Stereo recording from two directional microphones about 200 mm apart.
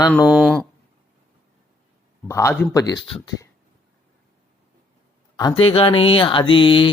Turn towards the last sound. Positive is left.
turn(degrees=25)  # may be behind; listen again after turning